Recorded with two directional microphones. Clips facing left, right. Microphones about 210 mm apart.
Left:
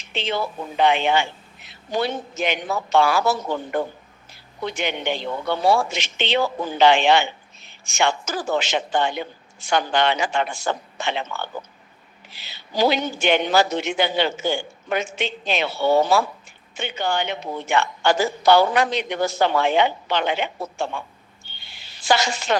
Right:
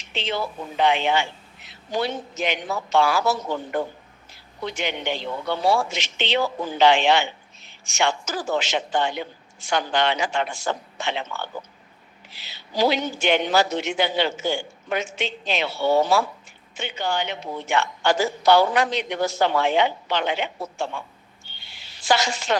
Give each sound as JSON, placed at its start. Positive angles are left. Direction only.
{"t": 0.1, "sound": "a man's voice", "side_deg": 55}
{"t": 4.6, "sound": "a man's voice", "side_deg": 55}
{"t": 22.0, "sound": "speech", "side_deg": 55}